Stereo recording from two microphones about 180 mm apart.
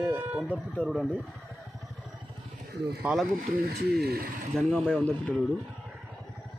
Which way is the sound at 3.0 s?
5° right (ahead or behind).